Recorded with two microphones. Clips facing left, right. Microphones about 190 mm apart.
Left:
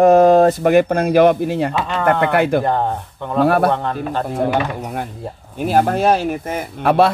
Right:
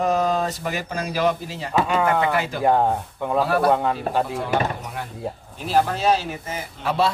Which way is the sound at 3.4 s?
60° left (ahead or behind).